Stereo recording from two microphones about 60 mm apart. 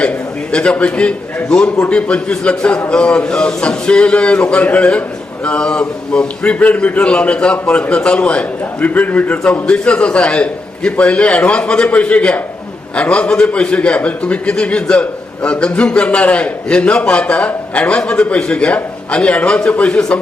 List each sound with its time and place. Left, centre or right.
0.5 s a man's voice: centre